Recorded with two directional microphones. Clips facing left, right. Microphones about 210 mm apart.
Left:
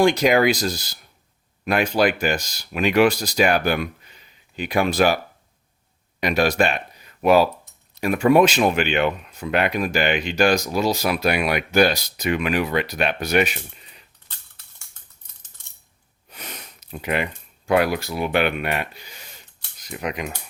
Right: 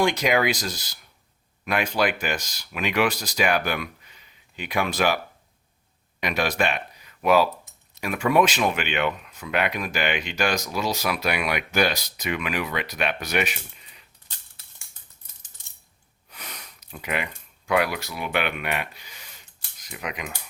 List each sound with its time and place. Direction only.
0.0 s speech: 35° left (ahead or behind)
16.3 s sniff: 25° left (ahead or behind)
17.7 s speech: 40° left (ahead or behind)